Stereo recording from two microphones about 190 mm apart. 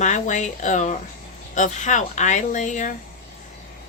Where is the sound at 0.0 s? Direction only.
40° left (ahead or behind).